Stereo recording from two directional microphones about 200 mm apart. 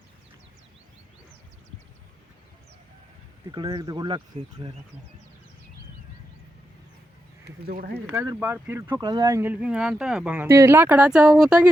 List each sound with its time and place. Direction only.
3.5 s speech: 20° right (ahead or behind)
7.6 s speech: 50° right (ahead or behind)
8.1 s speech: 10° right (ahead or behind)